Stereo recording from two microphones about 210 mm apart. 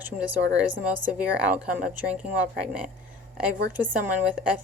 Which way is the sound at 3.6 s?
40° right (ahead or behind).